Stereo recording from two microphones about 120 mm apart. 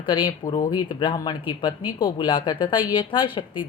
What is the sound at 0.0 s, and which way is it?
A woman's voice, 40° left (ahead or behind).